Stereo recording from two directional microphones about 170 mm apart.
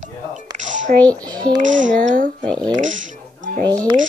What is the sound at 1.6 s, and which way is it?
Speech, 45° right (ahead or behind).